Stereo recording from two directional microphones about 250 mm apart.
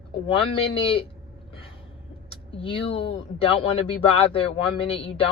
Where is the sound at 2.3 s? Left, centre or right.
Left.